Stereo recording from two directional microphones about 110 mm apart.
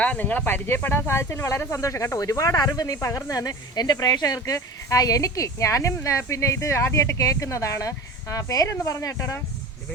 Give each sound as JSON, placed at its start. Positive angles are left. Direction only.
{"t": 0.0, "sound": "speech", "side_deg": 15}